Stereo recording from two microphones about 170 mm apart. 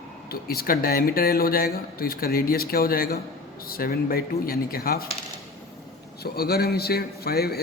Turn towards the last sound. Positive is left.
turn(degrees=65)  # may be behind; listen again after turning